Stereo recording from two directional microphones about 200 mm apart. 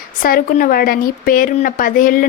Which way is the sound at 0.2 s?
45° left (ahead or behind).